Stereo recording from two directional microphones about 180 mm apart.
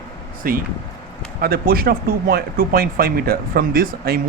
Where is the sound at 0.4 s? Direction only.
55° right (ahead or behind).